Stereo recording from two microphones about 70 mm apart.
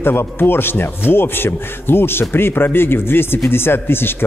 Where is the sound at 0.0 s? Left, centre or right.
Left.